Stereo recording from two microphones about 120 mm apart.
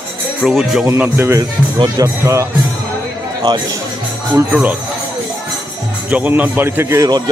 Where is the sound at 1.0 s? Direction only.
15° right (ahead or behind).